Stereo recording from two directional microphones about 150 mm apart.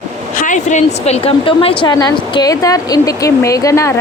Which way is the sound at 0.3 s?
55° left (ahead or behind).